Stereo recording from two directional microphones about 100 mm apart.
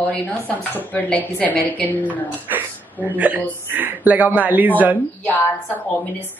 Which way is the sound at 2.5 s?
20° right (ahead or behind).